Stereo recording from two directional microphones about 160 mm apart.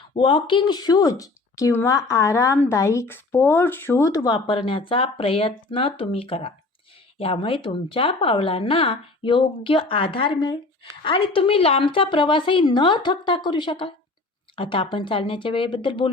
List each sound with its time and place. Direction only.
0.1 s speech: 30° left (ahead or behind)